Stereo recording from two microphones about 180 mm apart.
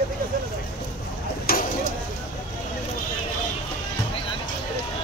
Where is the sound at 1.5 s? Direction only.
55° left (ahead or behind).